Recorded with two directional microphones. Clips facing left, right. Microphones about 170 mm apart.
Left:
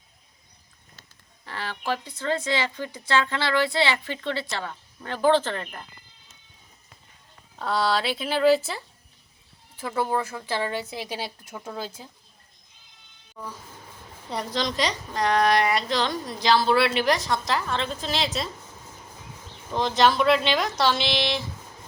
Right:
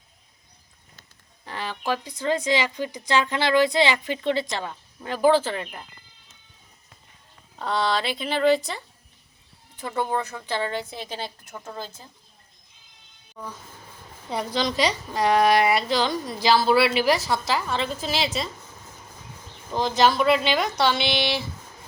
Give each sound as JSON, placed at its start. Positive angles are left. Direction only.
{"t": 1.5, "sound": "speech", "side_deg": -15}
{"t": 7.6, "sound": "a woman's voice", "side_deg": 5}
{"t": 13.3, "sound": "a woman's voice", "side_deg": 5}
{"t": 19.7, "sound": "a woman's voice", "side_deg": 0}